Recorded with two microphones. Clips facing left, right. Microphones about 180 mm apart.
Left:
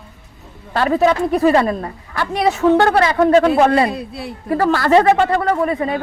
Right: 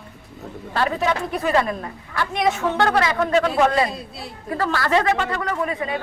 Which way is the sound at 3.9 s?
60° left (ahead or behind).